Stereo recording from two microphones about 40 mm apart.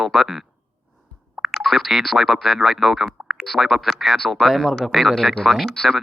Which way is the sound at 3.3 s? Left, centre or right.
Centre.